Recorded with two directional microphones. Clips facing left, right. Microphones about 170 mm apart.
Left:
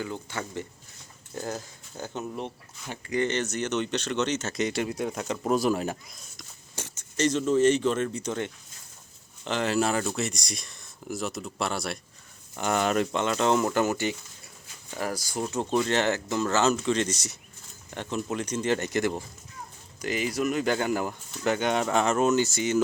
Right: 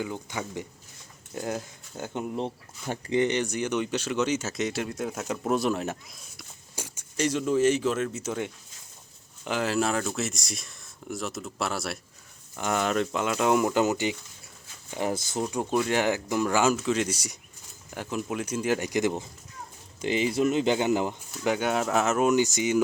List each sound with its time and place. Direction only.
0.0 s speech: 15° right (ahead or behind)
6.7 s speech: 10° right (ahead or behind)
13.2 s speech: 5° right (ahead or behind)